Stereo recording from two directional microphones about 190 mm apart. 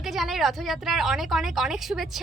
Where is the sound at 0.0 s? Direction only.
Centre (ahead or behind).